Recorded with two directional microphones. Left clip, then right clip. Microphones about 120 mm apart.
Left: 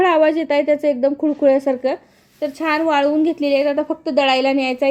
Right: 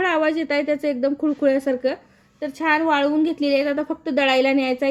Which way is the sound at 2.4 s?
40° left (ahead or behind).